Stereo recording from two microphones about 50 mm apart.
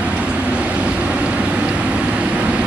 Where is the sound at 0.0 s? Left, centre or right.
Right.